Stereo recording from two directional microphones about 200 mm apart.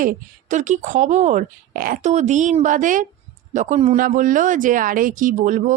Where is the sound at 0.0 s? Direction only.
40° right (ahead or behind).